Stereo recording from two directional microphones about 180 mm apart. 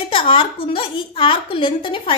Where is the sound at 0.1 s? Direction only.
30° left (ahead or behind).